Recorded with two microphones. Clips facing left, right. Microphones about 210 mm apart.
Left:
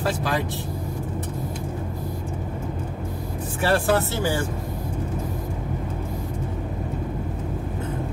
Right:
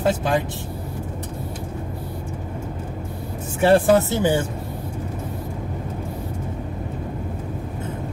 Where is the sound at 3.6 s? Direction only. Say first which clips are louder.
Right 6 dB; 20° right (ahead or behind).